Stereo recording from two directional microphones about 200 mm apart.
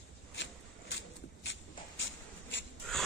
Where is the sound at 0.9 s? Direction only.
60° left (ahead or behind).